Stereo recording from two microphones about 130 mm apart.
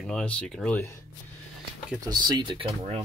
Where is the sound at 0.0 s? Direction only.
5° left (ahead or behind).